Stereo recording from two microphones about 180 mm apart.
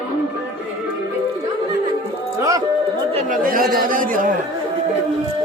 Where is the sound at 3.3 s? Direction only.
50° right (ahead or behind).